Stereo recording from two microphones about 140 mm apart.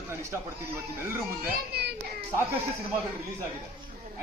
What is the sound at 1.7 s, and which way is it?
Speech, 90° right.